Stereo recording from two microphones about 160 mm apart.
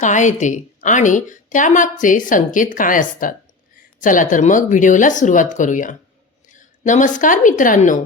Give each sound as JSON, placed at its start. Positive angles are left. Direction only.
{"t": 0.0, "sound": "a woman's voice", "side_deg": 50}